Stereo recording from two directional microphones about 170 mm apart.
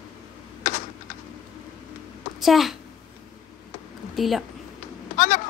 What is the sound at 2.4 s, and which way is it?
Speech, centre (ahead or behind).